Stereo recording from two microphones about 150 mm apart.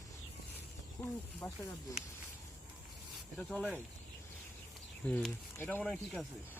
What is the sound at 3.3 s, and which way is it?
Speech, 5° left (ahead or behind).